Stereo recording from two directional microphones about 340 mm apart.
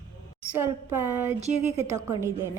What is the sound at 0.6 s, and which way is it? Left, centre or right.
A woman's voice, centre.